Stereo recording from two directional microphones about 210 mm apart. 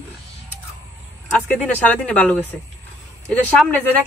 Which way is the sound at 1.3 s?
5° left (ahead or behind).